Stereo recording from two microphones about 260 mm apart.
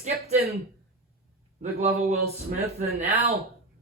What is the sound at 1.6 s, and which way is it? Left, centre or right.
Speech, right.